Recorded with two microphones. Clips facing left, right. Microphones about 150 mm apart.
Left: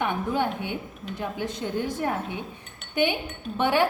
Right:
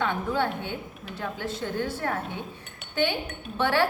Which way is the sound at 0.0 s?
15° left (ahead or behind).